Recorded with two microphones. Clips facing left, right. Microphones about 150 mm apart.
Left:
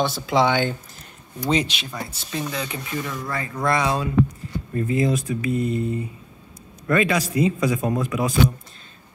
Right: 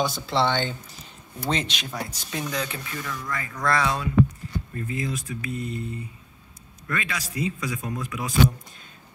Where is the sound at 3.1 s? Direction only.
35° left (ahead or behind).